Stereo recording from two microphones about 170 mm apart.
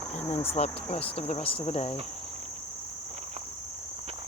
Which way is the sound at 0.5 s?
35° left (ahead or behind).